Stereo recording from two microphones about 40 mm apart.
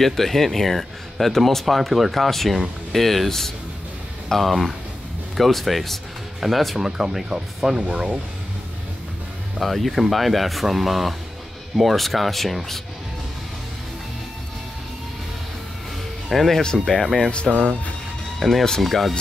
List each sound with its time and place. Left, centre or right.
0.0 s speech: centre
7.0 s speech: centre
7.8 s speech: right
9.6 s speech: centre
16.3 s speech: centre
17.3 s speech: left
18.4 s speech: centre